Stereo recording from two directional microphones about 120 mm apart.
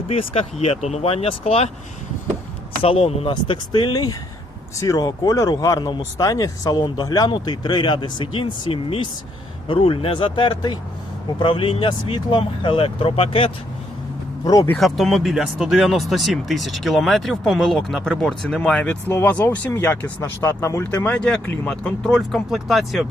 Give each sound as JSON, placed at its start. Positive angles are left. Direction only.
{"t": 0.1, "sound": "speech", "side_deg": 55}
{"t": 2.8, "sound": "speech", "side_deg": 55}
{"t": 14.4, "sound": "speech", "side_deg": 35}
{"t": 14.8, "sound": "speech", "side_deg": 0}